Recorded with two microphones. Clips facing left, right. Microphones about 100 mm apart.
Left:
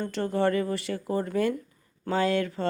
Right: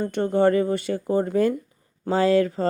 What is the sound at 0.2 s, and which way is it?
Speech, 30° right (ahead or behind).